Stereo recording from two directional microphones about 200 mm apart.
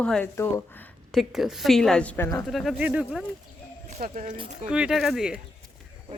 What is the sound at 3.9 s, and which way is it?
Speech, 40° right (ahead or behind).